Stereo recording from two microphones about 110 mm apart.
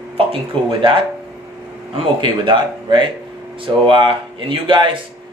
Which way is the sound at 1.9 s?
50° right (ahead or behind).